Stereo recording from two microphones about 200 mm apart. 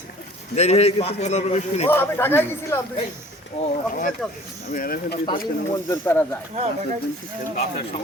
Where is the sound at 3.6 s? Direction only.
40° left (ahead or behind).